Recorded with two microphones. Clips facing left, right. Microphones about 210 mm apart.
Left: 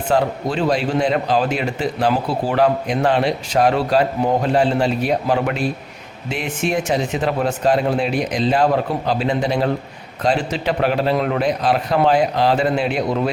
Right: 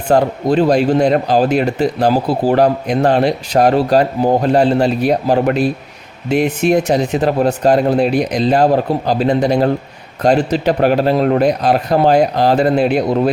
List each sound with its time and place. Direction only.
0.1 s speech: 40° right (ahead or behind)